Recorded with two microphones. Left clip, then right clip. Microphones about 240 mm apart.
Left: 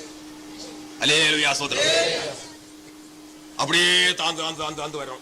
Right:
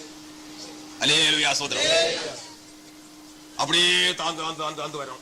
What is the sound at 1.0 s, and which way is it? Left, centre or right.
Speech, centre.